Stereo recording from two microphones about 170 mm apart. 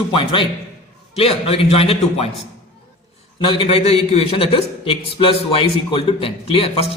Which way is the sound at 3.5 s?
30° left (ahead or behind).